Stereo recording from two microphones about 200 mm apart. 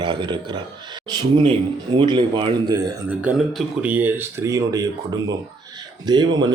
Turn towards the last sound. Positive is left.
turn(degrees=-20)  # may be behind; listen again after turning